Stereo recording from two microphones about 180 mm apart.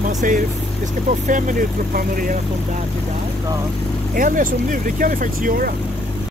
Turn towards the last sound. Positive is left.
turn(degrees=-50)  # may be behind; listen again after turning